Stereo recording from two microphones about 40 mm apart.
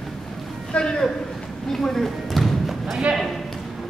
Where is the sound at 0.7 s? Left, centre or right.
Left.